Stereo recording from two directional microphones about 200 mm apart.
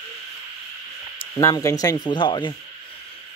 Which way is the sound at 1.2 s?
15° left (ahead or behind).